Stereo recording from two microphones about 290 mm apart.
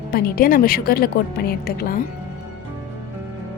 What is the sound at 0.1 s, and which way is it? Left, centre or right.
Speech, left.